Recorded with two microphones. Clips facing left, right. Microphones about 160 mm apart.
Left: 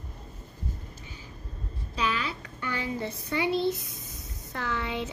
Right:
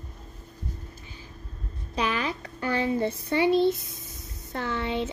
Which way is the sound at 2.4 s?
35° right (ahead or behind).